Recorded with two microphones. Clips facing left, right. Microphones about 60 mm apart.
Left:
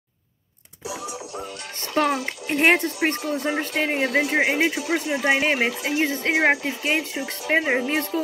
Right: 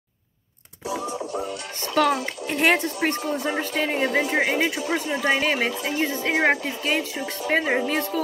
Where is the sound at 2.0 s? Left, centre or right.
Centre.